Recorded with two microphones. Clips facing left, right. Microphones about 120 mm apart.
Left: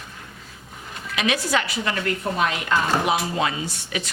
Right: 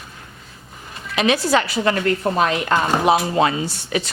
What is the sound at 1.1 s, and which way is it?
Speech, 30° right (ahead or behind).